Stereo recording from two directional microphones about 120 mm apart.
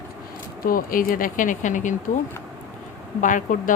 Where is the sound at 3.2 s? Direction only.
90° left.